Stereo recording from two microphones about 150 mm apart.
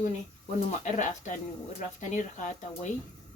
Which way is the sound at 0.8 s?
55° left (ahead or behind).